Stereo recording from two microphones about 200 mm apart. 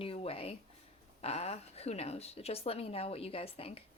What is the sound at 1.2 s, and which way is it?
A woman's voice, 30° left (ahead or behind).